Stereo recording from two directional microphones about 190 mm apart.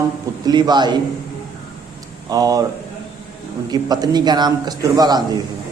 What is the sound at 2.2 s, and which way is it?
Speech, 20° right (ahead or behind).